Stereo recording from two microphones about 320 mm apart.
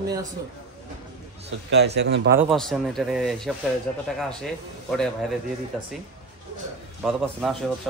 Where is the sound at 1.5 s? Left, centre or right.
Right.